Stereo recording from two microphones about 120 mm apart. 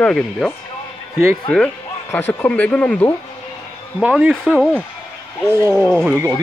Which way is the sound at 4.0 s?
10° right (ahead or behind).